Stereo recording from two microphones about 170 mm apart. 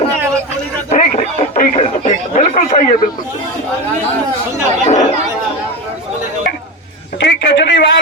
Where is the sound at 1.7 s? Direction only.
40° left (ahead or behind).